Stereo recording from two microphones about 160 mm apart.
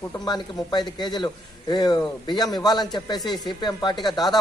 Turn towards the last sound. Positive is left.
turn(degrees=25)  # may be behind; listen again after turning